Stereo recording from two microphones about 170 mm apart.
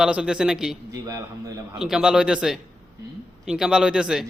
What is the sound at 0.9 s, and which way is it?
Speech, 20° right (ahead or behind).